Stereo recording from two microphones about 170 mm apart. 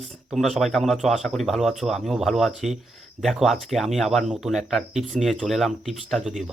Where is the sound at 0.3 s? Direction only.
Centre (ahead or behind).